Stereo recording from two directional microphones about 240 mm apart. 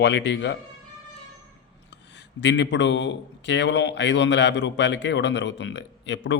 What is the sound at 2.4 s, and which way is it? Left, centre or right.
A man's voice, left.